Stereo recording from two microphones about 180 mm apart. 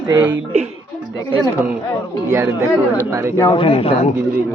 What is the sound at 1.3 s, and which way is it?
Speech, 10° right (ahead or behind).